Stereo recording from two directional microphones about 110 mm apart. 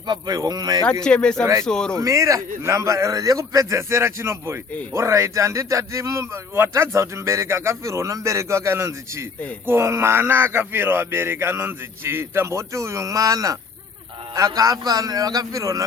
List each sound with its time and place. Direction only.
0.1 s a man's voice: 35° right (ahead or behind)
1.0 s speech: 10° left (ahead or behind)
2.0 s a man's voice: 30° right (ahead or behind)